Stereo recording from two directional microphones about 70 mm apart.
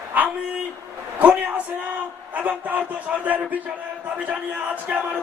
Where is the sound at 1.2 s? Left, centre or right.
Right.